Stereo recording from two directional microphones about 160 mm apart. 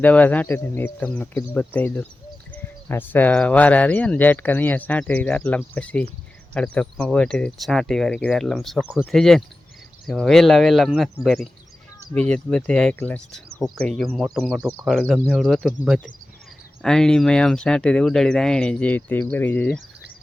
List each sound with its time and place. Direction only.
0.0 s speech: 10° left (ahead or behind)
14.6 s speech: 20° right (ahead or behind)
14.8 s speech: centre (ahead or behind)